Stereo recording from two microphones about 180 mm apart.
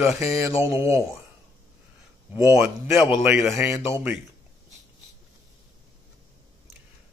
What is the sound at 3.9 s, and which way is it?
Speech, 10° right (ahead or behind).